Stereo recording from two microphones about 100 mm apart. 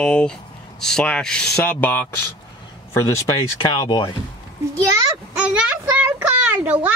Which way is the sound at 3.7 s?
50° left (ahead or behind).